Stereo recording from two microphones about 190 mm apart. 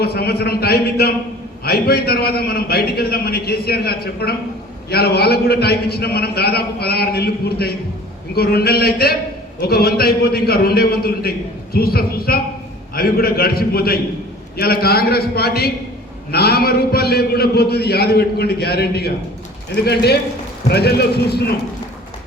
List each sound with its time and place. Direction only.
0.0 s a man's voice: 55° left (ahead or behind)